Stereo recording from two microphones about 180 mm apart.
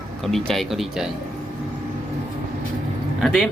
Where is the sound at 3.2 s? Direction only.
Centre (ahead or behind).